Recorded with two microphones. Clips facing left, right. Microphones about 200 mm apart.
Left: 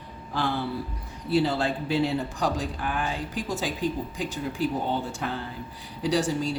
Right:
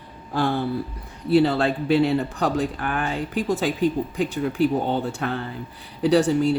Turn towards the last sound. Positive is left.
turn(degrees=-60)  # may be behind; listen again after turning